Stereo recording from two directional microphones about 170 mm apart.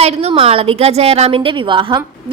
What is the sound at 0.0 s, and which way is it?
A woman's voice, 35° right (ahead or behind).